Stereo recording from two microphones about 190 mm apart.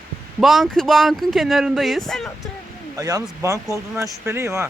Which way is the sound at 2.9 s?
20° right (ahead or behind).